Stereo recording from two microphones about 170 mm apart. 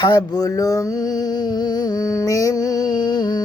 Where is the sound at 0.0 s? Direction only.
25° left (ahead or behind).